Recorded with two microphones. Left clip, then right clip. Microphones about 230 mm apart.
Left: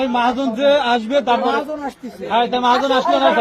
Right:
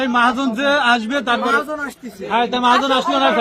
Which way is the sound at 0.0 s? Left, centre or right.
Right.